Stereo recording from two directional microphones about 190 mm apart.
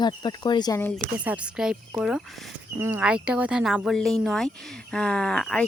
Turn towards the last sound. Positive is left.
turn(degrees=5)  # may be behind; listen again after turning